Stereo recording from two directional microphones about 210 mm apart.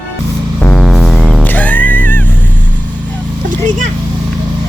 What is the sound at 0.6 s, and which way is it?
Music, 5° left (ahead or behind).